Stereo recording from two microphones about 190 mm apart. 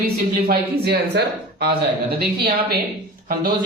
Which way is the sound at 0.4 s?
60° right (ahead or behind).